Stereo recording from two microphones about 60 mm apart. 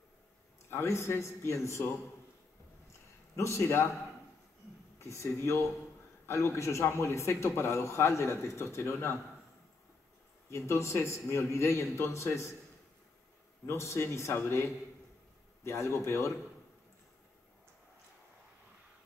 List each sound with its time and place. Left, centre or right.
0.7 s a man's voice: left
3.3 s a man's voice: left
4.9 s a man's voice: left
10.5 s a man's voice: left
13.7 s a man's voice: left